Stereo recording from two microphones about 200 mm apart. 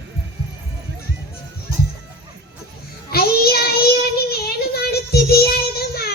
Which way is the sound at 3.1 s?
50° left (ahead or behind).